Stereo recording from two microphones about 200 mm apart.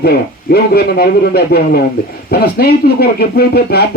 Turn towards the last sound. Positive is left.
turn(degrees=50)  # may be behind; listen again after turning